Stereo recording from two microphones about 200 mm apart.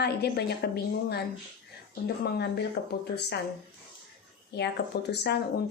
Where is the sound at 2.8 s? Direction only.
55° left (ahead or behind).